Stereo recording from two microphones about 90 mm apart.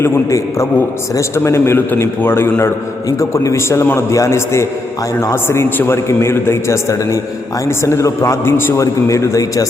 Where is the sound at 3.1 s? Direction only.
35° left (ahead or behind).